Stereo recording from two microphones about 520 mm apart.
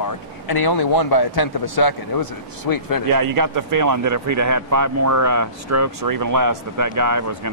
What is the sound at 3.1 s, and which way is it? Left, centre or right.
Speech, right.